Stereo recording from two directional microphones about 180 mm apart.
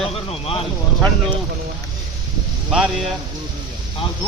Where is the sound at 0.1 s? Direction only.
30° left (ahead or behind).